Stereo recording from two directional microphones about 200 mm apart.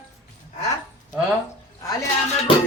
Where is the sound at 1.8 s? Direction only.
15° left (ahead or behind).